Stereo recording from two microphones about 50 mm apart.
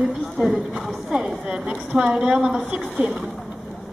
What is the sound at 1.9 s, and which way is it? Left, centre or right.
Speech, centre.